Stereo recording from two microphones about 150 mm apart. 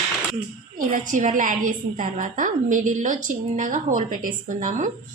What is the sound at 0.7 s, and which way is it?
A woman's voice, 60° right (ahead or behind).